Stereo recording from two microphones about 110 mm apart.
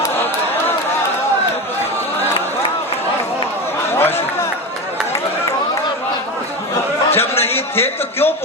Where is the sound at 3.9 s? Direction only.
20° left (ahead or behind).